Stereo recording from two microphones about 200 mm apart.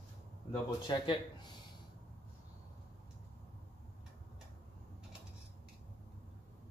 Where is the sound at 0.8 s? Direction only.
20° left (ahead or behind).